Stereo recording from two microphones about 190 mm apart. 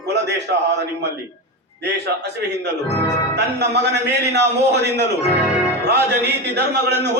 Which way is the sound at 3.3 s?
60° right (ahead or behind).